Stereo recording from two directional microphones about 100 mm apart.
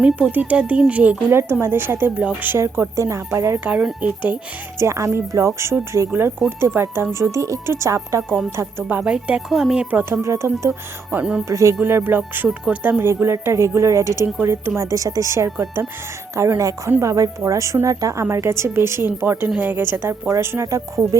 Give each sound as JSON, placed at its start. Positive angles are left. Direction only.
{"t": 0.0, "sound": "speech", "side_deg": -15}
{"t": 3.6, "sound": "speech", "side_deg": -15}
{"t": 4.8, "sound": "speech", "side_deg": -30}
{"t": 8.5, "sound": "speech", "side_deg": -15}
{"t": 9.9, "sound": "speech", "side_deg": -15}
{"t": 10.2, "sound": "speech", "side_deg": -30}
{"t": 11.2, "sound": "speech", "side_deg": -10}
{"t": 11.4, "sound": "speech", "side_deg": -30}
{"t": 13.0, "sound": "speech", "side_deg": -25}